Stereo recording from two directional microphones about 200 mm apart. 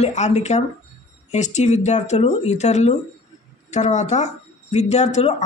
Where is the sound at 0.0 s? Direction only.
35° left (ahead or behind).